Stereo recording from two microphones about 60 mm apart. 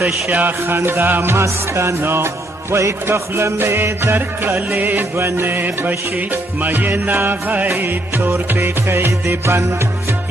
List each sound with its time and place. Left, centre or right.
0.3 s music: right
1.4 s music: right